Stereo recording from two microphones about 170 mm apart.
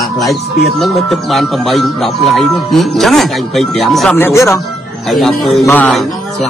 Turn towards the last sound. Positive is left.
turn(degrees=0)  # may be behind; listen again after turning